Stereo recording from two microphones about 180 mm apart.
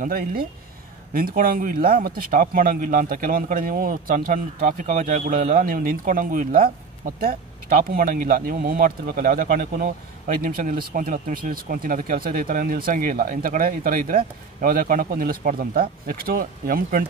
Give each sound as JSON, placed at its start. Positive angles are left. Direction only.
{"t": 0.0, "sound": "speech", "side_deg": -50}